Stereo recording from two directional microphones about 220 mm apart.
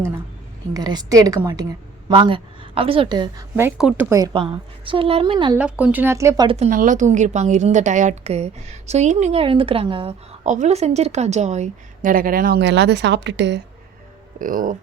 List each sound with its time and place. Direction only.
0.7 s a woman's voice: 20° right (ahead or behind)
3.5 s a woman's voice: 5° right (ahead or behind)
5.5 s a woman's voice: 5° right (ahead or behind); by 6.7 s 20° right (ahead or behind)
6.7 s a woman's voice: 35° right (ahead or behind); by 13.6 s 55° right (ahead or behind)
14.3 s a woman's voice: 40° right (ahead or behind)